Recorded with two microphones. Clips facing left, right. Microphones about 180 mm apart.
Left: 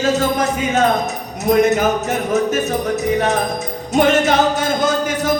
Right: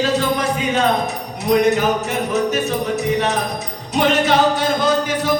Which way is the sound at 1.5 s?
50° left (ahead or behind).